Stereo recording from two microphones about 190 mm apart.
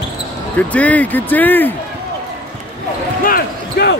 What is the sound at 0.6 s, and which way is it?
Speech, 10° left (ahead or behind).